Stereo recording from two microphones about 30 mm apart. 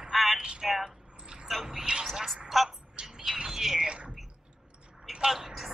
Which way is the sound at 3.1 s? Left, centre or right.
Right.